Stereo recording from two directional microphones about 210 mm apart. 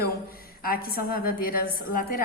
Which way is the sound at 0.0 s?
45° left (ahead or behind).